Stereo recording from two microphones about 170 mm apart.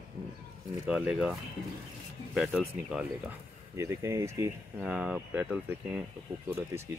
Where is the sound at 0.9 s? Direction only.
5° right (ahead or behind).